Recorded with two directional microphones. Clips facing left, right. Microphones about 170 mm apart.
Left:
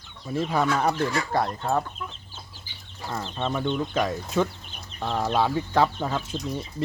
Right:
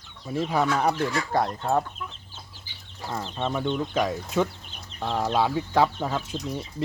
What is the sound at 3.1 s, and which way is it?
Speech, 10° right (ahead or behind).